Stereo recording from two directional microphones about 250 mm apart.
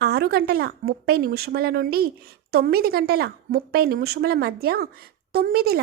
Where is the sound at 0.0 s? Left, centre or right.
Right.